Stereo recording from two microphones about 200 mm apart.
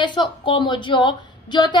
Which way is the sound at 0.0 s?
25° left (ahead or behind).